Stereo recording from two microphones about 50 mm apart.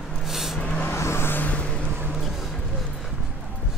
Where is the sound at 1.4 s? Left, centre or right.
Left.